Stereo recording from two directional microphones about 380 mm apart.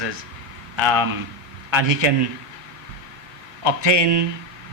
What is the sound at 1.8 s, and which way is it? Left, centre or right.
Speech, right.